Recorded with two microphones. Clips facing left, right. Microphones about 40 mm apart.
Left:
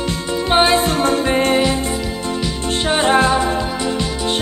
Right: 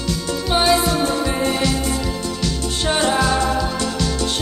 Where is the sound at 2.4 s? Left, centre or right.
Centre.